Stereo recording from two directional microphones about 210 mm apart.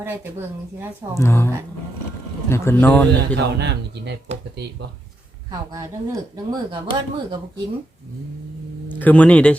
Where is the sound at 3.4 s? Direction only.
50° right (ahead or behind).